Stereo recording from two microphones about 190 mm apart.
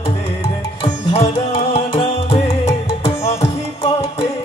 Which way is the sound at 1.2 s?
30° left (ahead or behind).